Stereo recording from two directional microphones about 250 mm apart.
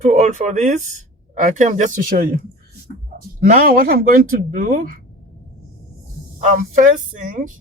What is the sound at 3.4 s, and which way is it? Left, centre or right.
Speech, right.